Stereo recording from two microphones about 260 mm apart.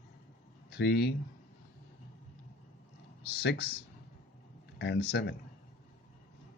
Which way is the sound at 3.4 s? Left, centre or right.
Left.